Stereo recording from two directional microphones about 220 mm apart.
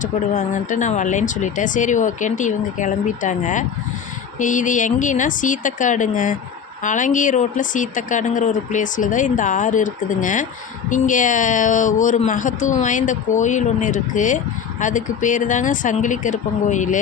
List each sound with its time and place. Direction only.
0.0 s a woman's voice: 35° left (ahead or behind)